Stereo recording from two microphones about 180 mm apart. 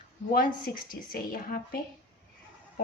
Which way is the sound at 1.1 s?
50° left (ahead or behind).